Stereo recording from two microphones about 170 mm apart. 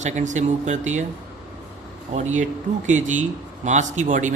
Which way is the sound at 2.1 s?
45° right (ahead or behind).